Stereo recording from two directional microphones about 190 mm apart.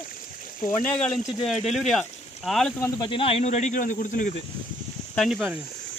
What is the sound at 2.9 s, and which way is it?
Speech, 25° left (ahead or behind).